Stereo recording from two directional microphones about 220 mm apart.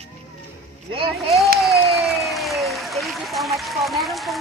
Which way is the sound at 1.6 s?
Centre (ahead or behind).